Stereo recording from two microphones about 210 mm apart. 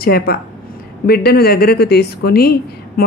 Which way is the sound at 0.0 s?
45° left (ahead or behind).